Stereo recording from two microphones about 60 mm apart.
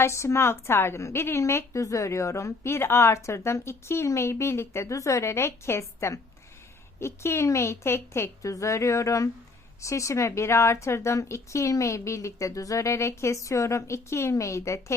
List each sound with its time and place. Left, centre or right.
0.0 s a woman's voice: left
8.4 s speech: left